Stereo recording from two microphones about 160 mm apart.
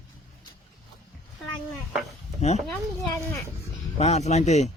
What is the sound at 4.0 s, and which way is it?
Speech, 45° left (ahead or behind).